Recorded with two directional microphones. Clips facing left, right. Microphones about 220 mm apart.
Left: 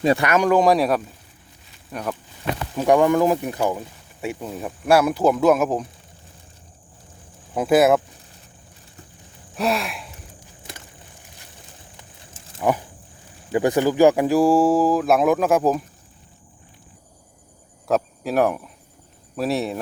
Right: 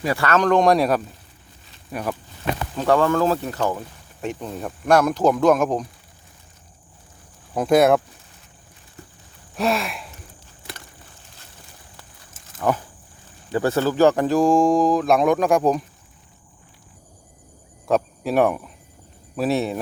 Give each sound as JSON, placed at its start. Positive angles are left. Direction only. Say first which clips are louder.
{"t": 0.0, "sound": "speech", "louder": "left 5 dB", "side_deg": 25}
{"t": 0.3, "sound": "speech", "louder": "right 3 dB", "side_deg": 10}
{"t": 2.7, "sound": "speech", "louder": "left 2 dB", "side_deg": 15}
{"t": 7.5, "sound": "speech", "louder": "even", "side_deg": 5}
{"t": 9.6, "sound": "speech", "louder": "right 1 dB", "side_deg": 0}
{"t": 12.5, "sound": "a sound", "louder": "left 1 dB", "side_deg": 10}
{"t": 13.5, "sound": "speech", "louder": "left 2 dB", "side_deg": 15}
{"t": 17.8, "sound": "speech", "louder": "right 1 dB", "side_deg": 0}